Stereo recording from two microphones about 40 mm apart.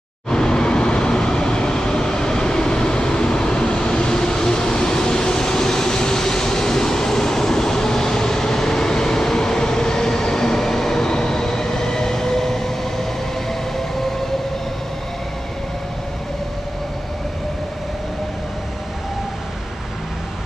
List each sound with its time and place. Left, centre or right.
0.3 s vehicle: centre